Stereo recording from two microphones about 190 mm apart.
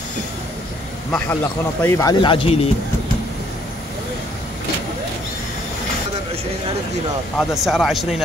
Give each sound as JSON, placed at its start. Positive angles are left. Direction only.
{"t": 1.1, "sound": "speech", "side_deg": 10}
{"t": 7.3, "sound": "speech", "side_deg": 0}